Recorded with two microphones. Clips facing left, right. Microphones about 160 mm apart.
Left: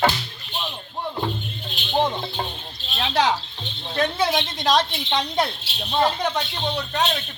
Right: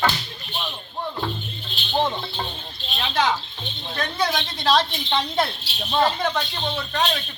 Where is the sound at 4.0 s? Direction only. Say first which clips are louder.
Left 3 dB; 25° left (ahead or behind).